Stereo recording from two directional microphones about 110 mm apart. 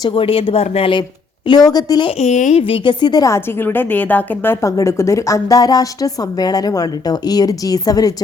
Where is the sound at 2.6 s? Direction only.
50° left (ahead or behind).